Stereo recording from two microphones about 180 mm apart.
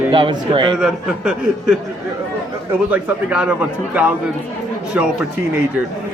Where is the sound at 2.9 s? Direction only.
10° right (ahead or behind).